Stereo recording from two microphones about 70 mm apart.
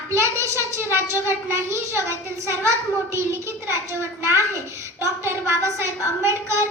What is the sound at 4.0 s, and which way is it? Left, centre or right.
Child singing, right.